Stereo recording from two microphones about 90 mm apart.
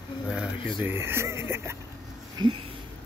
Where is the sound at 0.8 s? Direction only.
30° right (ahead or behind).